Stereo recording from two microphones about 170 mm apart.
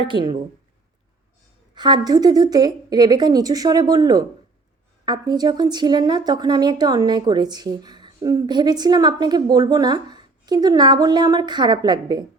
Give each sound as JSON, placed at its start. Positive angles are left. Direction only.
{"t": 0.1, "sound": "a woman's voice", "side_deg": -25}
{"t": 1.7, "sound": "a woman's voice", "side_deg": -25}